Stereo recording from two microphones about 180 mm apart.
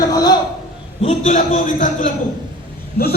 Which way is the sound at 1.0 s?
40° left (ahead or behind).